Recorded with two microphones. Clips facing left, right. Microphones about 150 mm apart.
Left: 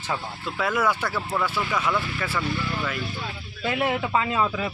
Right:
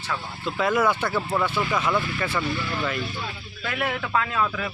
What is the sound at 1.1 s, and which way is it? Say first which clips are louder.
Speech: right 2 dB; 15° right (ahead or behind).